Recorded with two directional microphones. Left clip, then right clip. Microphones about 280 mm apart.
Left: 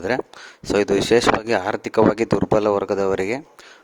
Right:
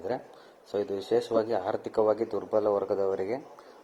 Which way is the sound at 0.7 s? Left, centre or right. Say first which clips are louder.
Left 11 dB; left.